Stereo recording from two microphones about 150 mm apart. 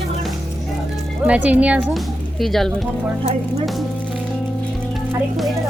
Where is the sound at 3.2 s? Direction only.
45° right (ahead or behind).